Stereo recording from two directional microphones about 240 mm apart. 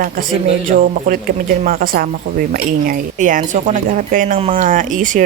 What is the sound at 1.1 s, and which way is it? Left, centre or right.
Speech, right.